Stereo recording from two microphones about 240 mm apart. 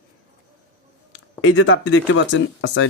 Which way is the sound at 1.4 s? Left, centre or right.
Left.